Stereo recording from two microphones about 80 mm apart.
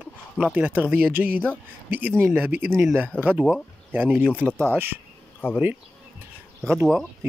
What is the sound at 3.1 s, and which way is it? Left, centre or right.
Speech, centre.